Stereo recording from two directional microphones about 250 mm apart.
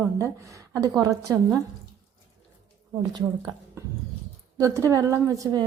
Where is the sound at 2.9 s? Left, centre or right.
Centre.